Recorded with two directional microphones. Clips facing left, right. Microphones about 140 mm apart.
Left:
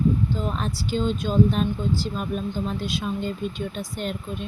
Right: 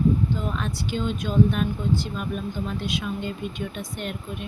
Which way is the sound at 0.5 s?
35° left (ahead or behind).